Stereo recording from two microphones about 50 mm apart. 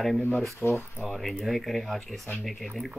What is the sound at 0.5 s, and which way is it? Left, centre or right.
Speech, left.